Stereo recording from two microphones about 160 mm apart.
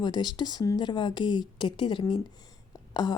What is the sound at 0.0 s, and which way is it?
Speech, 25° left (ahead or behind).